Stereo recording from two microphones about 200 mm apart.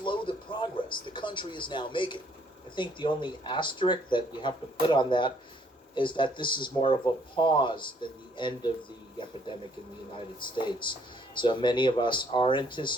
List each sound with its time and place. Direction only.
0.0 s television: 25° left (ahead or behind)
2.7 s speech: 25° left (ahead or behind)